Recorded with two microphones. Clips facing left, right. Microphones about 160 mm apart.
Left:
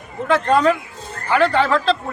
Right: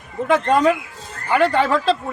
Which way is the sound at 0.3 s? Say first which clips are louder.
Even; 15° right (ahead or behind).